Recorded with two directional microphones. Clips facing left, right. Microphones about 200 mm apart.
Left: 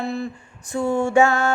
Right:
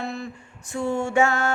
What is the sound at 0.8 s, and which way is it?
Music, 50° left (ahead or behind).